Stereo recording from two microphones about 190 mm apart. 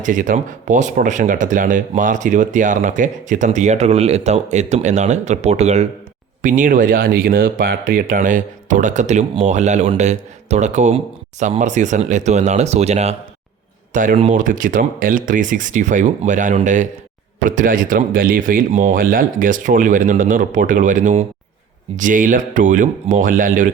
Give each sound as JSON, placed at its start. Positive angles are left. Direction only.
{"t": 0.0, "sound": "speech", "side_deg": -40}